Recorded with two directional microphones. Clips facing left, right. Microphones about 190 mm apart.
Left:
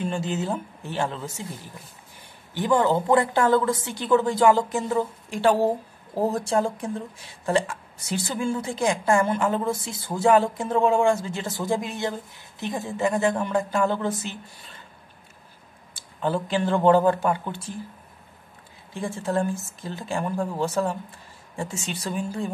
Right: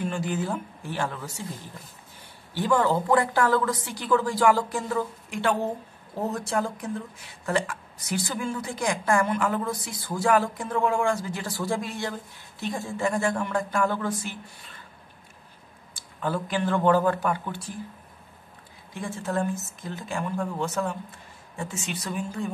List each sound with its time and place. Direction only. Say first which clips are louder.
0.0 s a woman's voice: left 1 dB; 25° left (ahead or behind)
2.5 s a woman's voice: left 2 dB; 20° left (ahead or behind)
16.2 s a woman's voice: left 3 dB; 25° left (ahead or behind)
18.9 s a woman's voice: left 3 dB; 30° left (ahead or behind)